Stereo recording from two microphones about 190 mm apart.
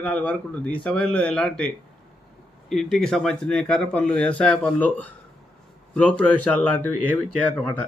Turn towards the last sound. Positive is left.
turn(degrees=5)  # may be behind; listen again after turning